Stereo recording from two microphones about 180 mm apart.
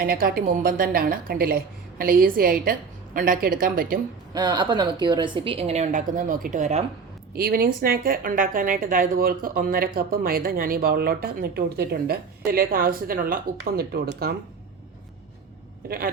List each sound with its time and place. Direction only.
0.0 s a woman's voice: 55° right (ahead or behind)
4.4 s a woman's voice: 25° right (ahead or behind); by 6.8 s 40° right (ahead or behind)
7.3 s a woman's voice: 55° right (ahead or behind)
15.9 s a woman's voice: 55° right (ahead or behind)